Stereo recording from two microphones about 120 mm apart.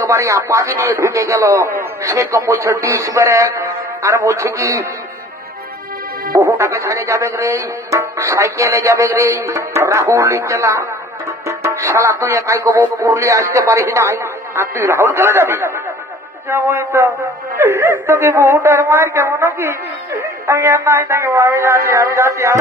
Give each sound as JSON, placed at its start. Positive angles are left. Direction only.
{"t": 0.0, "sound": "speech", "side_deg": -25}
{"t": 6.3, "sound": "speech", "side_deg": -20}
{"t": 11.4, "sound": "music", "side_deg": -25}
{"t": 13.0, "sound": "speech", "side_deg": -25}